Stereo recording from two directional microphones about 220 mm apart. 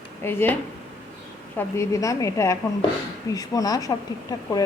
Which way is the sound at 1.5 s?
10° left (ahead or behind).